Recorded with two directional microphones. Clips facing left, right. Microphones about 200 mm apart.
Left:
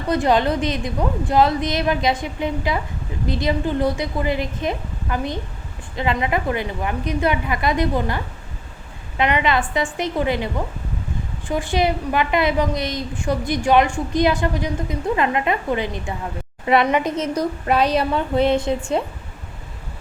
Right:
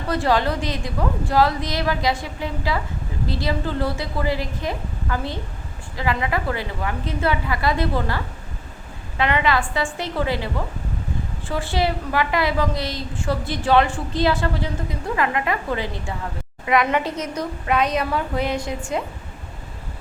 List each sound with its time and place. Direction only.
0.1 s a woman's voice: 20° left (ahead or behind)
17.3 s a woman's voice: 35° left (ahead or behind)